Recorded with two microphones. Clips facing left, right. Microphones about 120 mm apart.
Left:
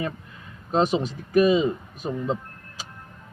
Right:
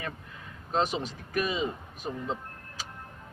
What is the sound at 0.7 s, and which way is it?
Speech, 20° left (ahead or behind).